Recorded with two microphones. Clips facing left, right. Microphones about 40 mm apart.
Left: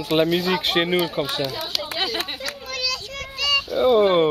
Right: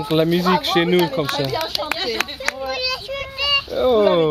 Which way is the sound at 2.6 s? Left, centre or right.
Centre.